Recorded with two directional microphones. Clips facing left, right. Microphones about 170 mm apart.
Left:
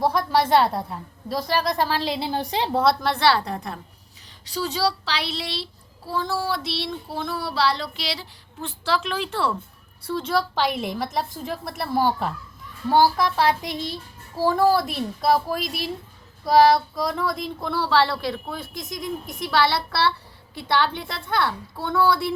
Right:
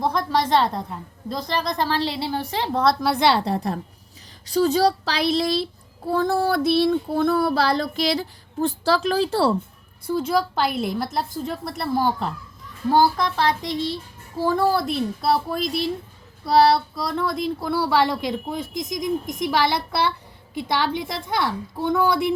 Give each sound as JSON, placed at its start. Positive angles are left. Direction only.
{"t": 0.0, "sound": "a woman's voice", "side_deg": 5}
{"t": 2.8, "sound": "a woman's voice", "side_deg": -5}
{"t": 3.2, "sound": "a woman's voice", "side_deg": -25}
{"t": 4.4, "sound": "child singing", "side_deg": -45}
{"t": 10.1, "sound": "a woman's voice", "side_deg": -10}
{"t": 14.5, "sound": "a woman's voice", "side_deg": 0}
{"t": 16.7, "sound": "a woman's voice", "side_deg": 0}